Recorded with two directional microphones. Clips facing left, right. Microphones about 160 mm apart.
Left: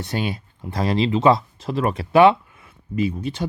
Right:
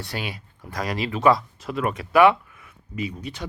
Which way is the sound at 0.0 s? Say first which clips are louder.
Left 6 dB; 25° left (ahead or behind).